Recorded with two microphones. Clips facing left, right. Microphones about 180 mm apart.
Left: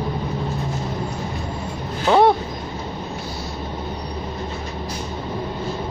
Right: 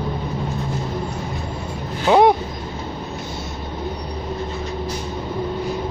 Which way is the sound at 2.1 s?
20° right (ahead or behind).